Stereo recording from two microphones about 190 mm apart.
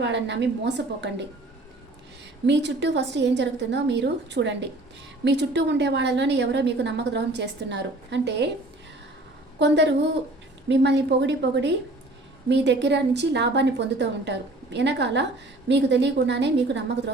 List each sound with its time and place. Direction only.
0.0 s a woman's voice: 65° right (ahead or behind)
2.5 s a woman's voice: 65° right (ahead or behind)
9.6 s a woman's voice: 65° right (ahead or behind)